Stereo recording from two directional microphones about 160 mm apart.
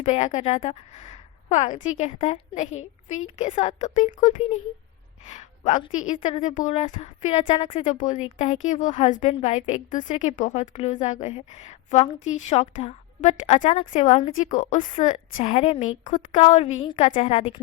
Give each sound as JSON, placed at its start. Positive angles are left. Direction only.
{"t": 0.0, "sound": "a woman's voice", "side_deg": 45}
{"t": 17.0, "sound": "a woman's voice", "side_deg": 50}